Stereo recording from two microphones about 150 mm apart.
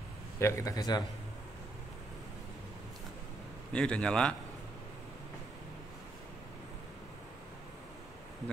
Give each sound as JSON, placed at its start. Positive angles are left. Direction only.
{"t": 0.4, "sound": "a man's voice", "side_deg": 20}
{"t": 3.7, "sound": "a man's voice", "side_deg": 5}